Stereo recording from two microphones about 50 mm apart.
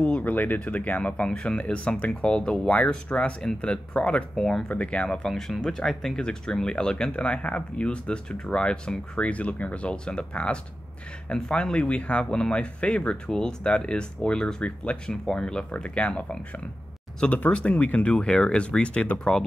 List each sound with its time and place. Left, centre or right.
0.0 s speech: left; by 4.6 s centre
4.6 s speech: left
5.3 s speech: centre; by 19.3 s left